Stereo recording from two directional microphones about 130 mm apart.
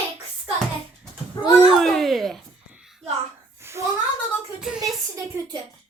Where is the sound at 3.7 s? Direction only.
20° right (ahead or behind).